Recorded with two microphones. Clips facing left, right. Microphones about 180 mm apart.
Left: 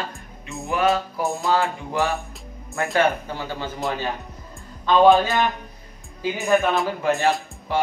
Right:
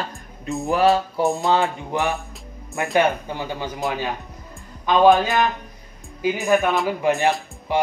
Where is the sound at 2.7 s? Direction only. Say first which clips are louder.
Right 1 dB; 20° right (ahead or behind).